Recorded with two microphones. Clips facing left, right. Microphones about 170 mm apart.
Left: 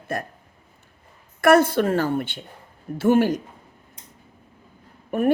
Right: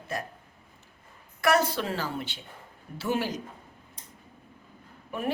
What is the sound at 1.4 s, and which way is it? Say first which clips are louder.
A woman's voice: left 9 dB; 55° left (ahead or behind).